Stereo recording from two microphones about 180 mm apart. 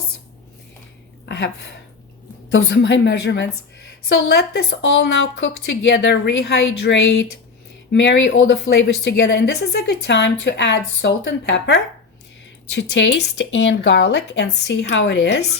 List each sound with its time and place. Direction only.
1.2 s a sound: 75° left (ahead or behind)
2.5 s speech: 75° left (ahead or behind)
4.1 s speech: 65° left (ahead or behind)
7.9 s speech: 90° left